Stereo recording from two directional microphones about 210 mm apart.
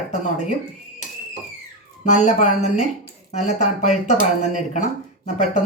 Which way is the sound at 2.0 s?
35° left (ahead or behind).